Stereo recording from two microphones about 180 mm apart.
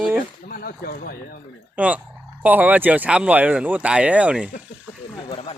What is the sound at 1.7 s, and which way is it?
Speech, 10° right (ahead or behind).